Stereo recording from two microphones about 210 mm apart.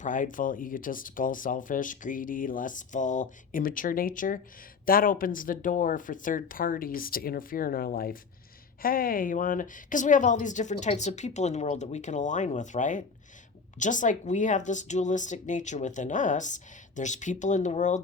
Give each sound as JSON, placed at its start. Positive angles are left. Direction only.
{"t": 0.0, "sound": "speech", "side_deg": 40}